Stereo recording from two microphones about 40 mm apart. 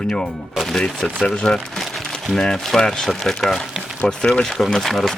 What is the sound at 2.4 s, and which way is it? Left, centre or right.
Speech, centre.